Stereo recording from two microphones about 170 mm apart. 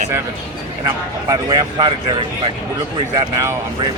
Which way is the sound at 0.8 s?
25° right (ahead or behind).